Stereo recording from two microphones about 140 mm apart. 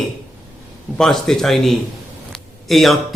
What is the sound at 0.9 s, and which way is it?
A man's voice, 5° left (ahead or behind).